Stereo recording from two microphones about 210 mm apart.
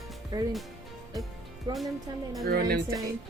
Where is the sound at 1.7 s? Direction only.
20° right (ahead or behind).